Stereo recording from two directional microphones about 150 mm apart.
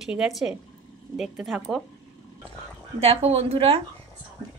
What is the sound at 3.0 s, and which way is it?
Speech, 45° right (ahead or behind).